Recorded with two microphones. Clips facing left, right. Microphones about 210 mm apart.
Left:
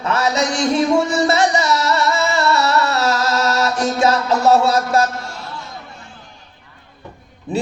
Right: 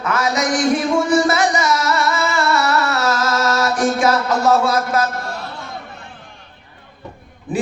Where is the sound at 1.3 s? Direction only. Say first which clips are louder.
Left 1 dB; 25° left (ahead or behind).